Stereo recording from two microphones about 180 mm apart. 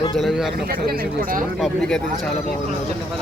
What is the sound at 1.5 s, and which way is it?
Speech, centre (ahead or behind).